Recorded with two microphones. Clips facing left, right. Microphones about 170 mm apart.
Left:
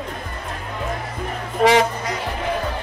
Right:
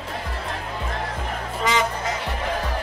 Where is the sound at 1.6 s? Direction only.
70° left (ahead or behind).